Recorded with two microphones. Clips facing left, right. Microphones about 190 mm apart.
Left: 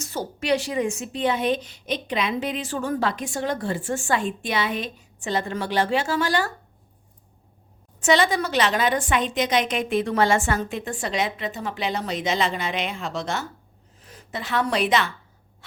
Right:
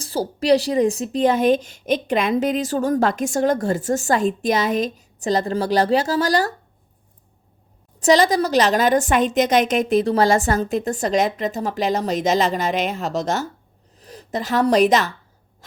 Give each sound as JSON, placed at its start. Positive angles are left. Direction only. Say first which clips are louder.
{"t": 0.0, "sound": "a woman's voice", "louder": "right 6 dB", "side_deg": -35}
{"t": 7.9, "sound": "a woman's voice", "louder": "right 5 dB", "side_deg": -40}